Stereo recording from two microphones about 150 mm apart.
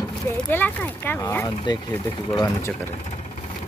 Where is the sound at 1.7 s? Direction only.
30° left (ahead or behind).